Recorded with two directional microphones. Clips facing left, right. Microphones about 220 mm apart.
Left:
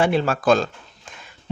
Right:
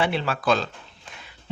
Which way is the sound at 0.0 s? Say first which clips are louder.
Left 5 dB; 45° left (ahead or behind).